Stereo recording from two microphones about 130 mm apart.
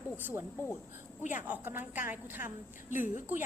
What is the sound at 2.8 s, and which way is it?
Speech, 75° left (ahead or behind).